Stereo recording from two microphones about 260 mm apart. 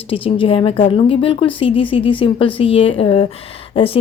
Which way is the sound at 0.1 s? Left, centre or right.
Left.